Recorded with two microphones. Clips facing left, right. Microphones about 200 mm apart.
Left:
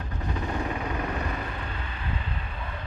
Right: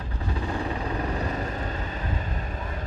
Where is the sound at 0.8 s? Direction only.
35° right (ahead or behind).